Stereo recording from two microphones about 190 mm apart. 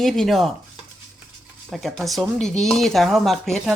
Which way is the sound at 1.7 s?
Centre (ahead or behind).